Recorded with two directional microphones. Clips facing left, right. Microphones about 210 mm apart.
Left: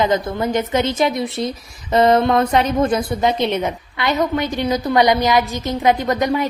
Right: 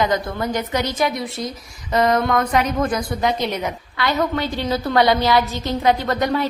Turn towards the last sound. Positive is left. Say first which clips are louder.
# left 2 dB
turn(degrees=15)  # may be behind; listen again after turning